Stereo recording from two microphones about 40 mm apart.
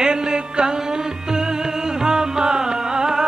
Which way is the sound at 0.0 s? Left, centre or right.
Centre.